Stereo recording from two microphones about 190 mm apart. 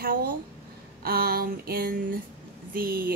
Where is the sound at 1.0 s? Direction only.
50° right (ahead or behind).